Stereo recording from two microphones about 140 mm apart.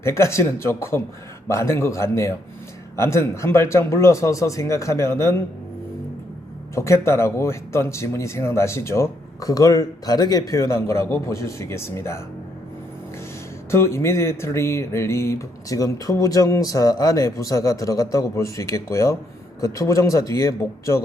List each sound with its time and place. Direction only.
0.0 s speech: 20° left (ahead or behind)
6.7 s speech: 20° left (ahead or behind)
13.7 s speech: 20° left (ahead or behind)